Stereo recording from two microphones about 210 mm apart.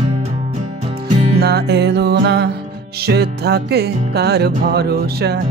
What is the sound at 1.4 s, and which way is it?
Music, 50° right (ahead or behind).